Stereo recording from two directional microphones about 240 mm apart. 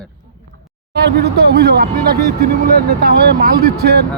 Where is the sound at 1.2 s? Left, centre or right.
Right.